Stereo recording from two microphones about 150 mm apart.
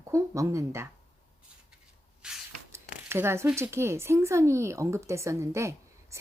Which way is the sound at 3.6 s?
15° right (ahead or behind).